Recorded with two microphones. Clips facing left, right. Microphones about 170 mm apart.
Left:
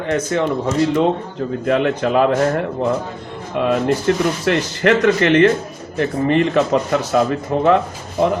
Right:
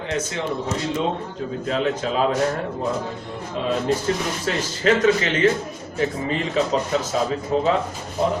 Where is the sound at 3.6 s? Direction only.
65° left (ahead or behind).